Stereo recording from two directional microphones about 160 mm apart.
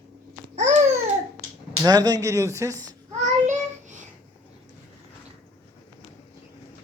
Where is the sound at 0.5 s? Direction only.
50° right (ahead or behind).